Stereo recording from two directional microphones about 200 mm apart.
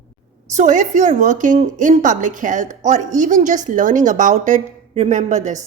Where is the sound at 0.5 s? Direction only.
35° right (ahead or behind).